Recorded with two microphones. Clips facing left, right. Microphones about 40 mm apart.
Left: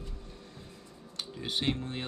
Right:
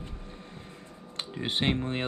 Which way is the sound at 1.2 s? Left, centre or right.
Right.